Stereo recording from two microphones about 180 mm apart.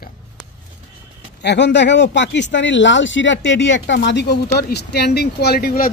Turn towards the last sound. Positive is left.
turn(degrees=55)  # may be behind; listen again after turning